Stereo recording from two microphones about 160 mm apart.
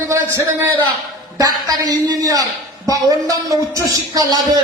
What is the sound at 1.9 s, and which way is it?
A man's voice, 20° right (ahead or behind).